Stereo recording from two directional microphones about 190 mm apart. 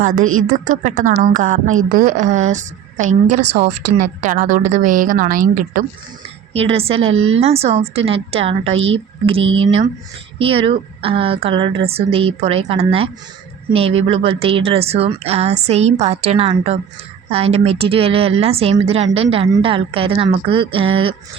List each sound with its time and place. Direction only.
0.2 s a woman's voice: 90° right
0.4 s a woman's voice: 45° right (ahead or behind)
6.5 s a woman's voice: 30° right (ahead or behind)
7.1 s a woman's voice: 90° right
7.3 s a woman's voice: 30° right (ahead or behind)